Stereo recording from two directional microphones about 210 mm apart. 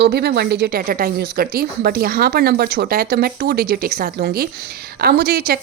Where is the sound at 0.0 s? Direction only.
50° right (ahead or behind).